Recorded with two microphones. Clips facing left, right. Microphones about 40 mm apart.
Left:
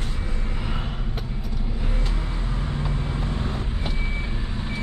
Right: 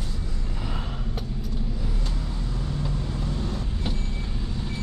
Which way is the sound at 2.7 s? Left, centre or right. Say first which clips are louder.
Left 2 dB; left.